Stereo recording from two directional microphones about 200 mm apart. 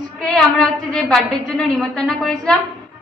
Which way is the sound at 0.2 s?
Centre (ahead or behind).